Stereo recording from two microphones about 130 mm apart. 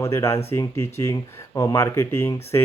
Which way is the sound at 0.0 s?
20° left (ahead or behind).